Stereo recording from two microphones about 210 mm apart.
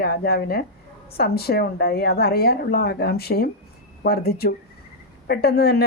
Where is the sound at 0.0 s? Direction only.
45° left (ahead or behind).